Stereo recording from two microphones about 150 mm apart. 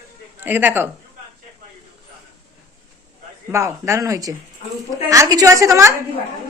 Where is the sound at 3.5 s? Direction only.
20° right (ahead or behind).